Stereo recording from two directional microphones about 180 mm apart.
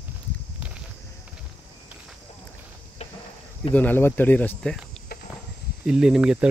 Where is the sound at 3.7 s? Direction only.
10° left (ahead or behind).